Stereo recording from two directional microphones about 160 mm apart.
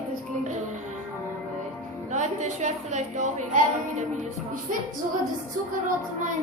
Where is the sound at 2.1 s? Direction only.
45° right (ahead or behind).